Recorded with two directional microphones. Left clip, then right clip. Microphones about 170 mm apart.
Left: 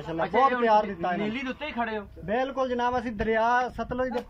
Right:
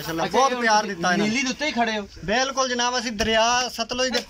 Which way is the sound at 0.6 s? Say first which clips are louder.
Right 3 dB; 10° left (ahead or behind).